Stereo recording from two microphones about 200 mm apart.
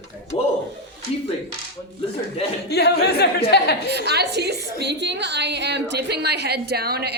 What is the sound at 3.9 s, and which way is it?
A woman's voice, 55° right (ahead or behind).